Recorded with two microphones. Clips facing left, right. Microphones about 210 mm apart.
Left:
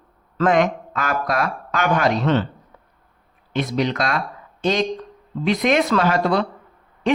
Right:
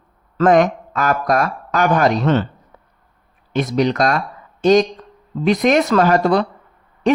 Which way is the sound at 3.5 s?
45° right (ahead or behind).